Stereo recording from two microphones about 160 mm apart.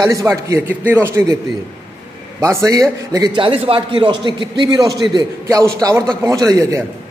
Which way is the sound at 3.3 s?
35° right (ahead or behind).